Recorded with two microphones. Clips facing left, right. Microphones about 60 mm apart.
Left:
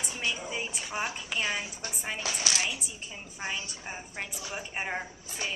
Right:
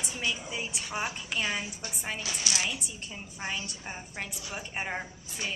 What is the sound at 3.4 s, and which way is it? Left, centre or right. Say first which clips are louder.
A woman's voice: even; centre.